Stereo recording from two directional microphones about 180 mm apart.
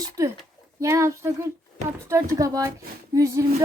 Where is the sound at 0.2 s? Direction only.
20° right (ahead or behind).